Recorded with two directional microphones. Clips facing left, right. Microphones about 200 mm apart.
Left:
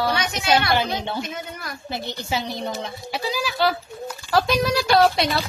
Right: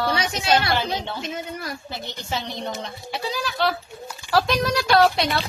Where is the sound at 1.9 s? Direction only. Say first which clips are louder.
Left 3 dB; 10° left (ahead or behind).